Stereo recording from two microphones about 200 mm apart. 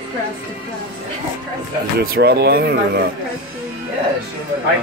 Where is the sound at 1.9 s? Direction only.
50° right (ahead or behind).